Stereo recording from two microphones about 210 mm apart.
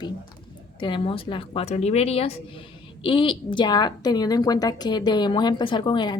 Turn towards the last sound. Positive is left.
turn(degrees=20)  # may be behind; listen again after turning